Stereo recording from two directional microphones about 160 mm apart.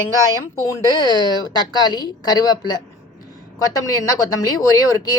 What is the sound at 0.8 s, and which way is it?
Speech, 25° left (ahead or behind).